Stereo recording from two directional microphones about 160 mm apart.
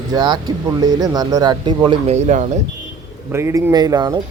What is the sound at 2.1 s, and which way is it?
Speech, 45° right (ahead or behind).